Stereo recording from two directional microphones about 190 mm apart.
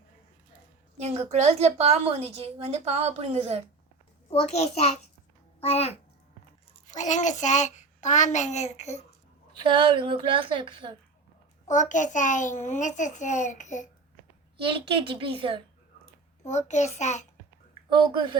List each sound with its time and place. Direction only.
0.9 s a woman's voice: 35° right (ahead or behind)
4.3 s a child's voice: 35° left (ahead or behind)
9.6 s a woman's voice: 25° right (ahead or behind)
11.7 s a child's voice: 40° left (ahead or behind)
14.6 s a woman's voice: 25° right (ahead or behind)
16.4 s a child's voice: 35° left (ahead or behind)
17.8 s a woman's voice: 25° right (ahead or behind)